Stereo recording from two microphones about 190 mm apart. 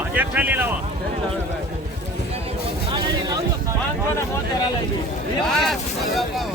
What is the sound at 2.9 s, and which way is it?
Music, 25° right (ahead or behind).